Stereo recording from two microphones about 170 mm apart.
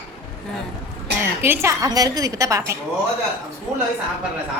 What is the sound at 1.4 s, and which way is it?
A woman's voice, 15° right (ahead or behind).